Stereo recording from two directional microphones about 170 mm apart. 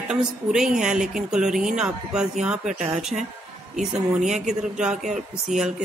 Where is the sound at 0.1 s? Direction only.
5° right (ahead or behind).